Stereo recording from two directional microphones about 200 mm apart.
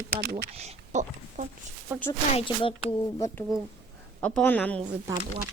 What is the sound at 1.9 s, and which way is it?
Speech, 10° right (ahead or behind).